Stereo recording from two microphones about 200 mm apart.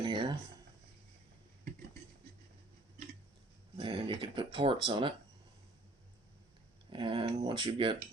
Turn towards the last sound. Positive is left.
turn(degrees=-25)  # may be behind; listen again after turning